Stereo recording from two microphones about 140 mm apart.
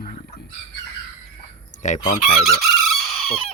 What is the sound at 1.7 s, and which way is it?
Fowl, 60° left (ahead or behind).